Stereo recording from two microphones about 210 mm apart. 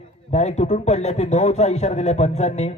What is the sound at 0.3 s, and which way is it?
A man's voice, 30° left (ahead or behind).